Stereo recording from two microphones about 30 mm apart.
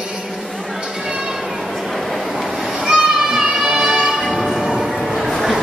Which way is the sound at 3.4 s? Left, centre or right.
Centre.